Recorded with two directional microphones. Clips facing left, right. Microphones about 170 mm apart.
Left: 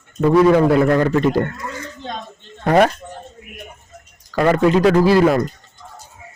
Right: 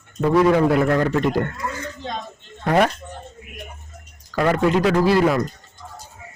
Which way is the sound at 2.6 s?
40° left (ahead or behind).